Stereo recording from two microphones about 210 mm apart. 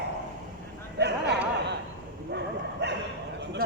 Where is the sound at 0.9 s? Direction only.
55° right (ahead or behind).